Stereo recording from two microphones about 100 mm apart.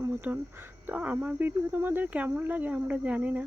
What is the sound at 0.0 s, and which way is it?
Speech, 20° right (ahead or behind).